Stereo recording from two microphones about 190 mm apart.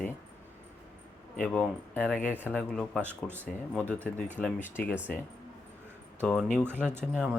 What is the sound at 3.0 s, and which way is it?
Speech, 10° right (ahead or behind).